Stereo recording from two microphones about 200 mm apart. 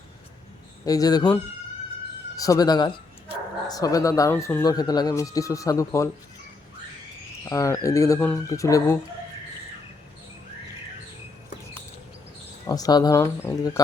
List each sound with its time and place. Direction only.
0.9 s speech: 20° left (ahead or behind)
2.3 s speech: 15° left (ahead or behind)
7.4 s speech: 15° left (ahead or behind)
12.6 s speech: 20° left (ahead or behind)